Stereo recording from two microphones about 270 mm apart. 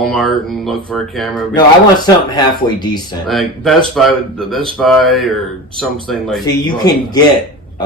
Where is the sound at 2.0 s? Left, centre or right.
Centre.